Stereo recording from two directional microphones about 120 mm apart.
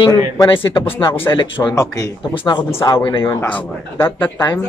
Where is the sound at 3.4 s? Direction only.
15° left (ahead or behind).